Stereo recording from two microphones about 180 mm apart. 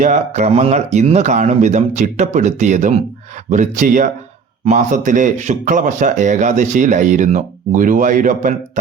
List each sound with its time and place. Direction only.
0.0 s speech: 40° right (ahead or behind)